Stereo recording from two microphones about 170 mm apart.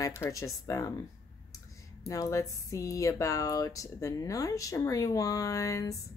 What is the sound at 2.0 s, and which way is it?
Speech, 20° left (ahead or behind).